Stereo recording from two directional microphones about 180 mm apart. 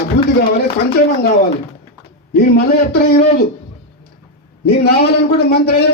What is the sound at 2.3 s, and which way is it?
Speech, 60° left (ahead or behind).